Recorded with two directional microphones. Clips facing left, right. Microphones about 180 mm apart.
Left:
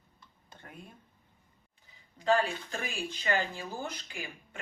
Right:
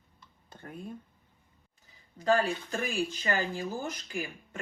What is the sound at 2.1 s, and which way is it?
Speech, 45° right (ahead or behind).